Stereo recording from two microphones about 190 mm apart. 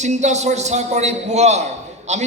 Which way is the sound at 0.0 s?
40° right (ahead or behind).